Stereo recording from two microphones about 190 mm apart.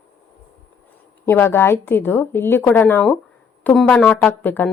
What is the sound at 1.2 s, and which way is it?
Speech, 10° left (ahead or behind).